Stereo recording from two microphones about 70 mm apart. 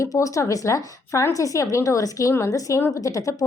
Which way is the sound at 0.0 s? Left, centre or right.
Left.